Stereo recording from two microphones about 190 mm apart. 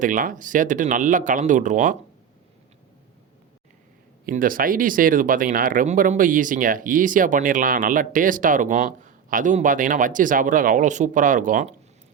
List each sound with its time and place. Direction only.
0.0 s speech: 45° right (ahead or behind)
4.3 s speech: 45° right (ahead or behind)